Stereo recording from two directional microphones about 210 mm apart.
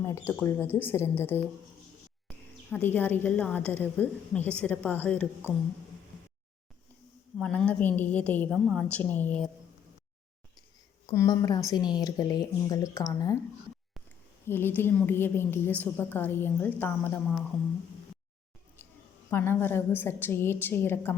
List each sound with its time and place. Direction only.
0.3 s a woman's voice: 10° left (ahead or behind)
7.3 s a woman's voice: 5° left (ahead or behind)
11.0 s a woman's voice: 15° left (ahead or behind)
14.4 s a woman's voice: 10° left (ahead or behind)
19.3 s a woman's voice: 10° left (ahead or behind)